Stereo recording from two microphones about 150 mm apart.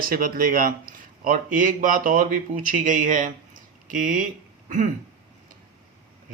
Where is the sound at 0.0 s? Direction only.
70° right (ahead or behind).